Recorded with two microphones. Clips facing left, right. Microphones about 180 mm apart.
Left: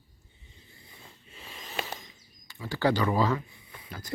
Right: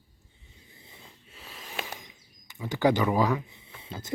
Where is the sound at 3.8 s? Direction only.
25° right (ahead or behind).